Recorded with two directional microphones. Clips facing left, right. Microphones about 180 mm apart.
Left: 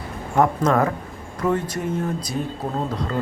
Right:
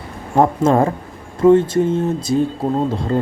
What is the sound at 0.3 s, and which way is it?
Speech, 30° right (ahead or behind).